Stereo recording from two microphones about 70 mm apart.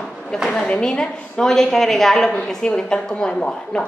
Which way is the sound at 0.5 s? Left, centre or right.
Centre.